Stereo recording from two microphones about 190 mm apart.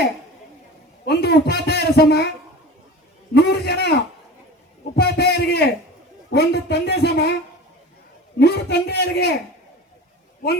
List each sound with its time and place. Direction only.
1.0 s a man's voice: 60° left (ahead or behind)
3.3 s a sound: 60° left (ahead or behind)
4.9 s a man's voice: 60° left (ahead or behind)
8.4 s speech: 60° left (ahead or behind)